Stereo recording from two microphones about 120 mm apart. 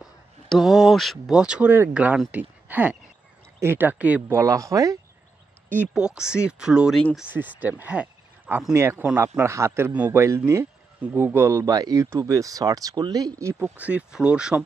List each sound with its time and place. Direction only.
0.0 s speech: centre (ahead or behind)
4.4 s speech: 25° right (ahead or behind)
5.9 s speech: 5° right (ahead or behind); by 13.7 s 25° right (ahead or behind)
13.7 s speech: 10° right (ahead or behind)